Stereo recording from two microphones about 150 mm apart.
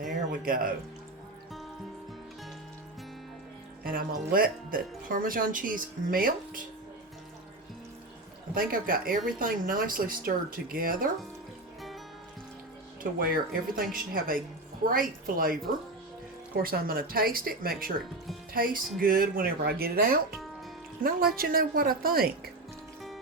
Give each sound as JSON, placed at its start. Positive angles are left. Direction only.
{"t": 0.4, "sound": "speech", "side_deg": -70}
{"t": 3.8, "sound": "speech", "side_deg": -75}
{"t": 8.5, "sound": "speech", "side_deg": -70}
{"t": 13.0, "sound": "speech", "side_deg": -75}
{"t": 16.6, "sound": "speech", "side_deg": -75}